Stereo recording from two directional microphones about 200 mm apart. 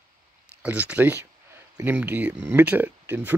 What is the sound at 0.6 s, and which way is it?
Speech, 10° right (ahead or behind).